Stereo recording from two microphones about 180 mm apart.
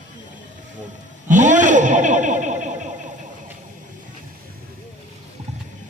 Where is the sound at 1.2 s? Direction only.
45° right (ahead or behind).